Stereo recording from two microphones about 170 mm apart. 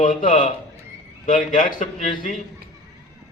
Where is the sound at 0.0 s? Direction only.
50° left (ahead or behind).